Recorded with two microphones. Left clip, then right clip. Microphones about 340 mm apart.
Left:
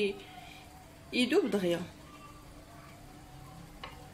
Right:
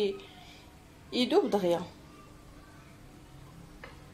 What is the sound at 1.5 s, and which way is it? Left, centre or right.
Speech, right.